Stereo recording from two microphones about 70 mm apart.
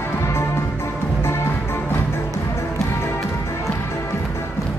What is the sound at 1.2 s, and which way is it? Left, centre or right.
Music, left.